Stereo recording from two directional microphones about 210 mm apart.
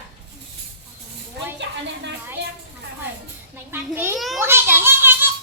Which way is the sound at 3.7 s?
10° right (ahead or behind).